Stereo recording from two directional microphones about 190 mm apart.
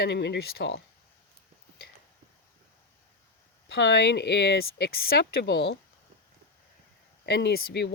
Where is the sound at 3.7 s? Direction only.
60° left (ahead or behind).